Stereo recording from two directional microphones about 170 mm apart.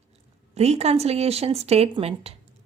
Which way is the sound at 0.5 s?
40° right (ahead or behind).